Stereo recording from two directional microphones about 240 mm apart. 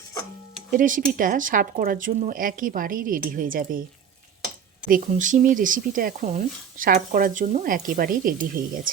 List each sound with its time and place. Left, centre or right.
0.7 s speech: right
4.9 s speech: right